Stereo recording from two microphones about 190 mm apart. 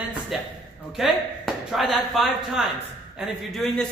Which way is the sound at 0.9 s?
Centre (ahead or behind).